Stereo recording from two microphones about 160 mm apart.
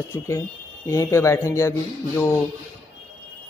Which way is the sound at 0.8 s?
20° left (ahead or behind).